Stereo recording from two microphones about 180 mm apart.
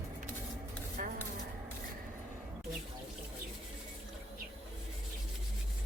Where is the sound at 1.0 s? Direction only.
50° right (ahead or behind).